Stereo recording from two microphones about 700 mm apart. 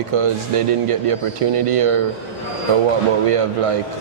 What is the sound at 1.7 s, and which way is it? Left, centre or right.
Speech, right.